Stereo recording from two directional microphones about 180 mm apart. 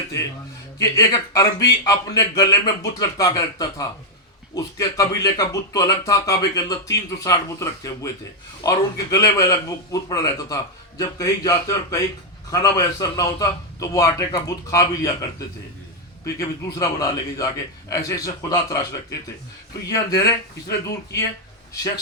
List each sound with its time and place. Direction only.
0.8 s speech: 20° left (ahead or behind)